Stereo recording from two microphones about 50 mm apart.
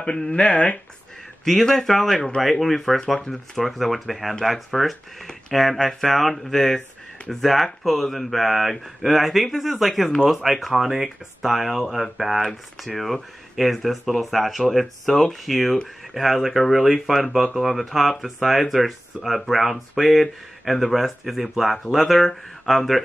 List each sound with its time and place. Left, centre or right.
0.0 s speech: centre
1.4 s speech: centre